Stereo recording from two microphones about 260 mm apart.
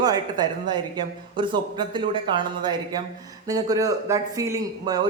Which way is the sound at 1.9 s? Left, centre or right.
Centre.